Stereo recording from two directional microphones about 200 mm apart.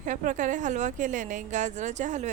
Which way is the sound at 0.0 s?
40° right (ahead or behind).